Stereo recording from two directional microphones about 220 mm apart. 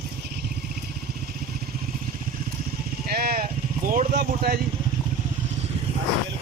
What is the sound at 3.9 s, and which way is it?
Speech, 40° right (ahead or behind).